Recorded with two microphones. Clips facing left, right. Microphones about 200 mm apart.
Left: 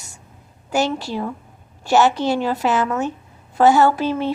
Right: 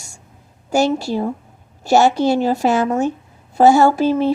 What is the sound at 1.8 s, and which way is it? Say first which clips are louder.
A woman's voice: right 3 dB; 40° right (ahead or behind).